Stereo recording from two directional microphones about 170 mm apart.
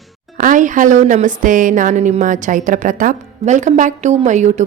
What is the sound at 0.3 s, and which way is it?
A woman's voice, 50° right (ahead or behind).